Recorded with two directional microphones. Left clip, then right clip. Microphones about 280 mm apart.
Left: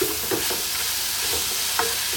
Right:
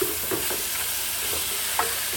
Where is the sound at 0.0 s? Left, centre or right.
Centre.